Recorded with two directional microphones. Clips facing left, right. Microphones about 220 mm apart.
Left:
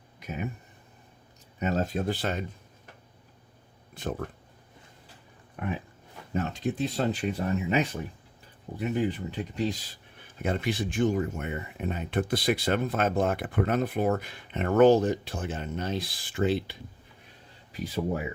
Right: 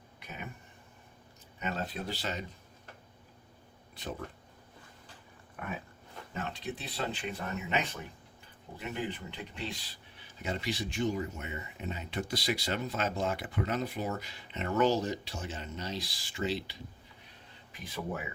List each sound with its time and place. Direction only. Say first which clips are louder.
1.5 s speech: left 8 dB; 40° left (ahead or behind)
6.3 s speech: left 9 dB; 40° left (ahead or behind)
17.7 s speech: left 8 dB; 35° left (ahead or behind)